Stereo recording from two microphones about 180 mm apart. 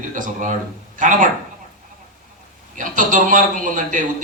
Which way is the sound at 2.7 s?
45° right (ahead or behind).